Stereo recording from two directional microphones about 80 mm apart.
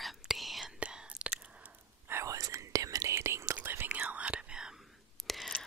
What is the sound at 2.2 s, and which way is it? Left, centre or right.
Whispering, right.